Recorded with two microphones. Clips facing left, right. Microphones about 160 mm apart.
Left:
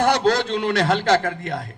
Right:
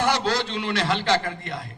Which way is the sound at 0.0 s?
45° left (ahead or behind).